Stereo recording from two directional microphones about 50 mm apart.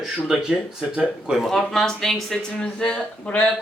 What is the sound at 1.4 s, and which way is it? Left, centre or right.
Speech, centre.